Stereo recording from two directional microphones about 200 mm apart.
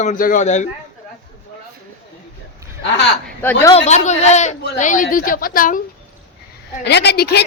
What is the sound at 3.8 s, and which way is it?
A man's voice, 35° left (ahead or behind).